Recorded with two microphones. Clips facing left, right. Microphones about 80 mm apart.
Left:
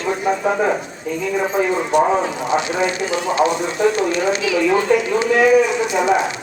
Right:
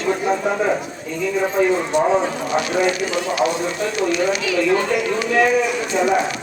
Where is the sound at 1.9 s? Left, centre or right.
Left.